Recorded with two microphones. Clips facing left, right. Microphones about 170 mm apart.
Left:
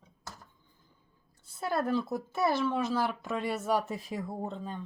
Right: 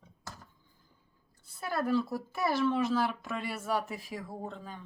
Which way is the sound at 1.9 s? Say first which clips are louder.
Even; 20° left (ahead or behind).